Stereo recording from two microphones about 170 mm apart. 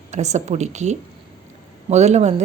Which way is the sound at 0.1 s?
40° right (ahead or behind).